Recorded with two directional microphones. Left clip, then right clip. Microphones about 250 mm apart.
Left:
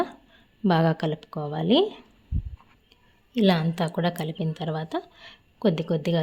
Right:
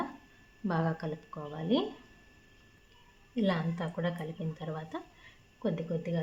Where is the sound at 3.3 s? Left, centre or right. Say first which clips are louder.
Left 9 dB; left.